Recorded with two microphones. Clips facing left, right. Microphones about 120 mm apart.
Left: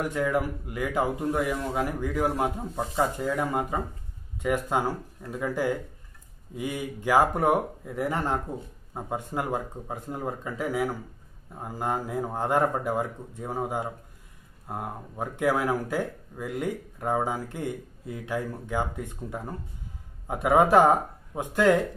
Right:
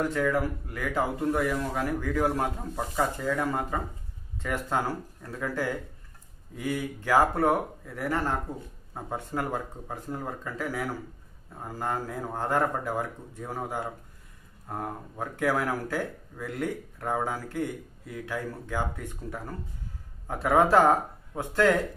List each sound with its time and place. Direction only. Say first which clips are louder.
0.0 s speech: even; 15° left (ahead or behind)